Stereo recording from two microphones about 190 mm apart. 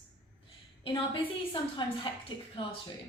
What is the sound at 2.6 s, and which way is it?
Speech, 30° left (ahead or behind).